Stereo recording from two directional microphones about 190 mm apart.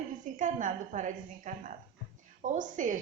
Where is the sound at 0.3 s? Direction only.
40° right (ahead or behind).